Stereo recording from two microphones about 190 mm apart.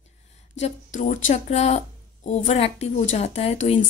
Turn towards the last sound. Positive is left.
turn(degrees=35)  # may be behind; listen again after turning